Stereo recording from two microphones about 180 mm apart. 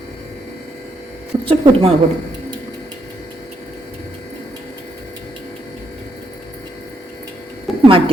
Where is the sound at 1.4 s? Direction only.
30° right (ahead or behind).